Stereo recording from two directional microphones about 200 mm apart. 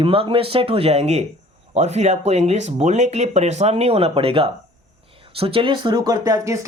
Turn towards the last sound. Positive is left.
turn(degrees=-15)  # may be behind; listen again after turning